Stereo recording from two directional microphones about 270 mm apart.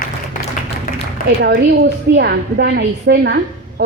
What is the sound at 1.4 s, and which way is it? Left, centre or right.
A woman's voice, right.